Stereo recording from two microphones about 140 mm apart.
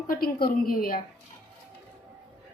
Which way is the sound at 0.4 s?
90° left.